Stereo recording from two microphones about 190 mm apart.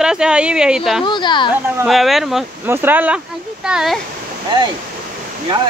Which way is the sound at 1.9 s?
Centre (ahead or behind).